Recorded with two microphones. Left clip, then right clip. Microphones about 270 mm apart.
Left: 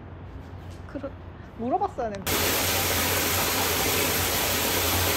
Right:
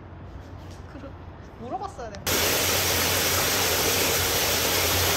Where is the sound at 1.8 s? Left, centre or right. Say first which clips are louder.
Left 6 dB; left.